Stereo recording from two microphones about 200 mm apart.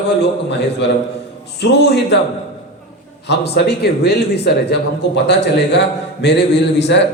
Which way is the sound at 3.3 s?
55° left (ahead or behind).